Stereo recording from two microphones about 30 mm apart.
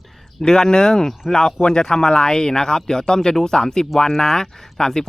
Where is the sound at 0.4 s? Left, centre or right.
Left.